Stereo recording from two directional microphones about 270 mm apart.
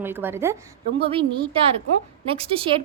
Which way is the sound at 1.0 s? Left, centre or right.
Centre.